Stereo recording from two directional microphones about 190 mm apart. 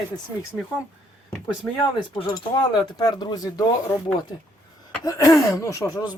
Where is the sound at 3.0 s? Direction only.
25° left (ahead or behind).